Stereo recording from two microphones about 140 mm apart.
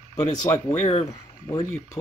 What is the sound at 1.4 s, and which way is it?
Speech, 20° left (ahead or behind).